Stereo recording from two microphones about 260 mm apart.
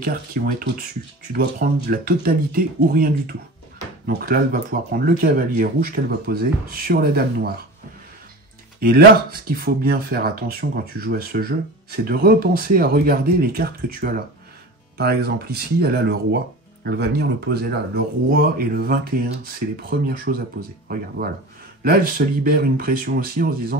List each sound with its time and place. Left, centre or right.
0.0 s speech: right
8.7 s speech: right
21.8 s speech: right